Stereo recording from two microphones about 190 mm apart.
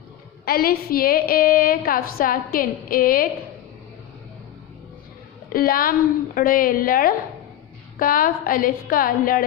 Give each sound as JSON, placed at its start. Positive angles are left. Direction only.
{"t": 0.4, "sound": "a woman's voice", "side_deg": 55}
{"t": 5.5, "sound": "a woman's voice", "side_deg": 50}